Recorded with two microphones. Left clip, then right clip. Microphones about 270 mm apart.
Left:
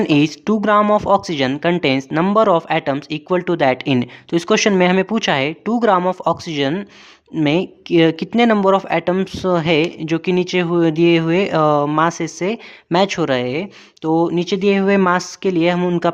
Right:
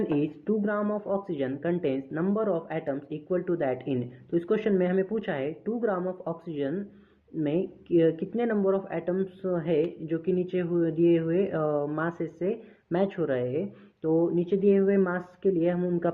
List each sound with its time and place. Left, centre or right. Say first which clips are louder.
0.1 s speech: left 12 dB; left